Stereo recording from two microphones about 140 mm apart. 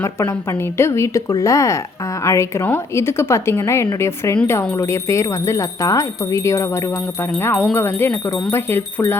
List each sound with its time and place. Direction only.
0.0 s speech: 20° left (ahead or behind)